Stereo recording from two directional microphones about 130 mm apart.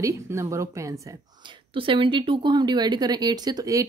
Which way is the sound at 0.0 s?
20° right (ahead or behind).